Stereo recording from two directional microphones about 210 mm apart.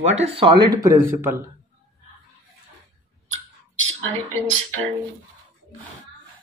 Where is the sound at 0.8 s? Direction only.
15° right (ahead or behind).